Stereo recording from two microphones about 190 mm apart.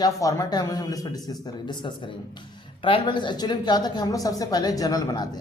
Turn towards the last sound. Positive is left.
turn(degrees=20)  # may be behind; listen again after turning